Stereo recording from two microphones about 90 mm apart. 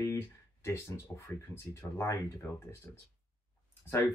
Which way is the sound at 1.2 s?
30° left (ahead or behind).